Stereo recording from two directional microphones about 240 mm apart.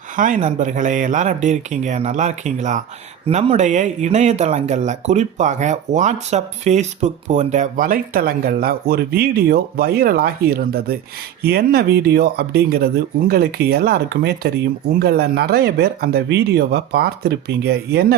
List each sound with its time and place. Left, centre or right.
0.2 s speech: right